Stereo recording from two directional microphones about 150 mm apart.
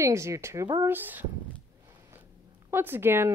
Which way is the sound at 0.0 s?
20° right (ahead or behind).